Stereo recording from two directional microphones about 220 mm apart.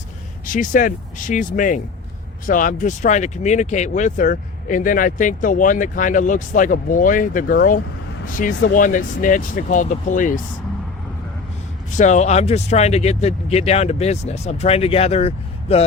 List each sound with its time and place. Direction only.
0.5 s speech: 35° left (ahead or behind)
11.9 s speech: 35° left (ahead or behind)